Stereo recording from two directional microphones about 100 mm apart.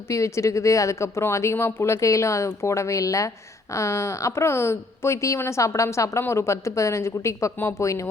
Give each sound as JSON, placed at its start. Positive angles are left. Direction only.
{"t": 0.1, "sound": "speech", "side_deg": 30}